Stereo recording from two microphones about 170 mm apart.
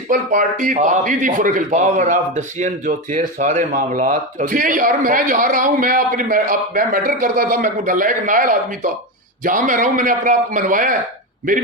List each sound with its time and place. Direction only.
0.1 s a man's voice: 50° right (ahead or behind)